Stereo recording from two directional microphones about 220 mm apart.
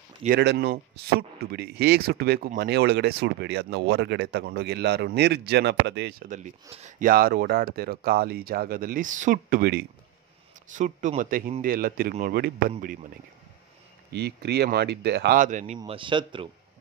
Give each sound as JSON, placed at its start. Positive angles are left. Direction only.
{"t": 0.2, "sound": "speech", "side_deg": -45}
{"t": 10.7, "sound": "speech", "side_deg": -35}
{"t": 14.1, "sound": "speech", "side_deg": -50}
{"t": 15.8, "sound": "a man's voice", "side_deg": -20}